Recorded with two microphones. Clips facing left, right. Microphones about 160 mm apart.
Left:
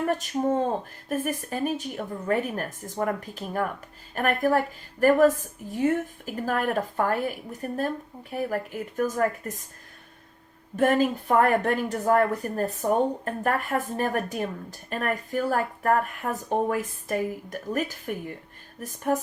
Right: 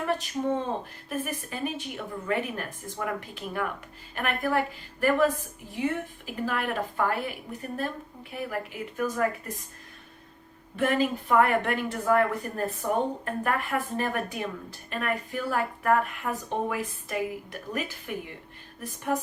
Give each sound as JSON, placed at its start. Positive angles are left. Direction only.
{"t": 0.0, "sound": "speech", "side_deg": 45}
{"t": 10.8, "sound": "speech", "side_deg": 45}
{"t": 18.8, "sound": "music", "side_deg": 45}